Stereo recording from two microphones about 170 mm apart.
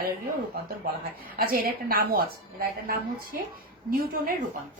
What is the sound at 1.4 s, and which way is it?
A woman's voice, 60° right (ahead or behind).